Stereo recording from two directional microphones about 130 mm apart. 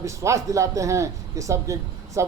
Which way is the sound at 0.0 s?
25° right (ahead or behind).